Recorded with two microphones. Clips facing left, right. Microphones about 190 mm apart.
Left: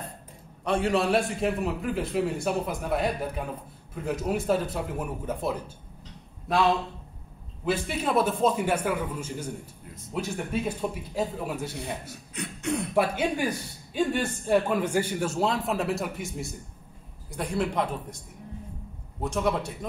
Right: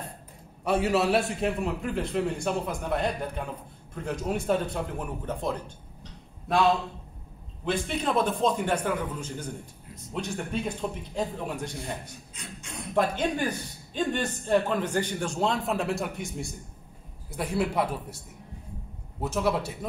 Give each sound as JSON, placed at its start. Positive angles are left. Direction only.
{"t": 0.7, "sound": "a man's voice", "side_deg": -5}
{"t": 7.6, "sound": "a man's voice", "side_deg": 5}
{"t": 12.4, "sound": "speech", "side_deg": 65}
{"t": 12.9, "sound": "a man's voice", "side_deg": 10}
{"t": 19.2, "sound": "a man's voice", "side_deg": -5}